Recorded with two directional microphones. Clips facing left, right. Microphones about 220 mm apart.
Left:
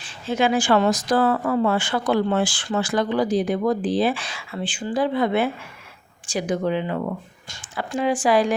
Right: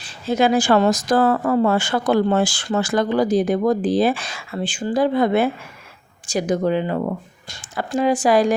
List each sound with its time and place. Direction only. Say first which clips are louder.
0.0 s a woman's voice: right 3 dB; 40° right (ahead or behind)